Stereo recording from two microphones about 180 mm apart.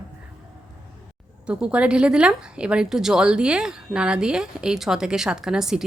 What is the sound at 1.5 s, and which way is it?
Speech, 5° right (ahead or behind).